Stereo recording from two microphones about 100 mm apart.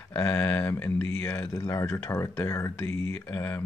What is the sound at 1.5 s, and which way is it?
Speech, 30° left (ahead or behind).